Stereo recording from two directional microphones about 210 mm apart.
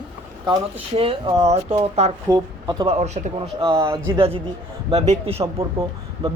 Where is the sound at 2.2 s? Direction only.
20° right (ahead or behind).